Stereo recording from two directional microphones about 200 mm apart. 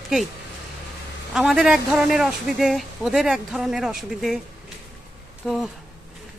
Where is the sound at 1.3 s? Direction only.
Centre (ahead or behind).